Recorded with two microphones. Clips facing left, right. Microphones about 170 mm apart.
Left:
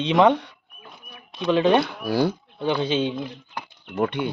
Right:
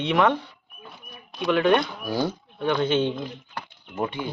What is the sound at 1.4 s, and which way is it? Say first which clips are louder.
Speech: left 2 dB; 20° left (ahead or behind).